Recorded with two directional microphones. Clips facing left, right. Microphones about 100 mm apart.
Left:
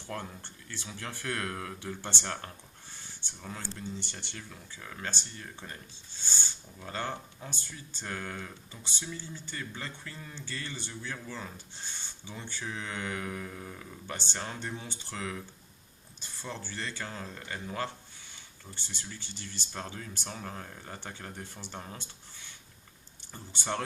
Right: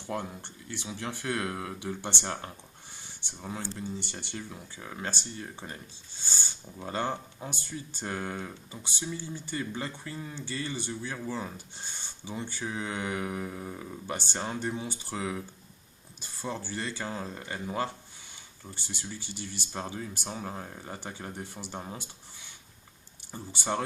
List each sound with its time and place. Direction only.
0.0 s speech: 15° right (ahead or behind)
23.3 s speech: 10° right (ahead or behind)